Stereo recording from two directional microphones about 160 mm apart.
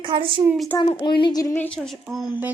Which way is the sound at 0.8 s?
30° left (ahead or behind).